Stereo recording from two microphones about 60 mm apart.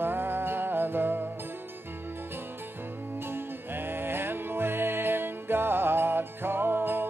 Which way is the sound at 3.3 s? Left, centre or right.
Right.